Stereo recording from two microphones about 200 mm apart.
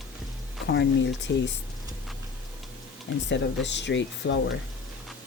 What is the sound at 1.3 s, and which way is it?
Speech, 65° left (ahead or behind).